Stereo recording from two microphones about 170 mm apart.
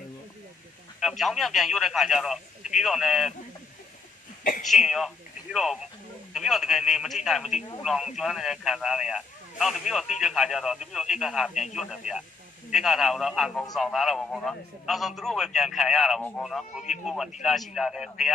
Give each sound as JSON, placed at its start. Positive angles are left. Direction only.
{"t": 1.0, "sound": "a man's voice", "side_deg": 0}
{"t": 4.4, "sound": "a sound", "side_deg": 50}
{"t": 4.6, "sound": "a man's voice", "side_deg": 0}